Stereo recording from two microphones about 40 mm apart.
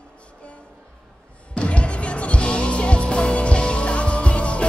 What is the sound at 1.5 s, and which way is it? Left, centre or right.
Music, left.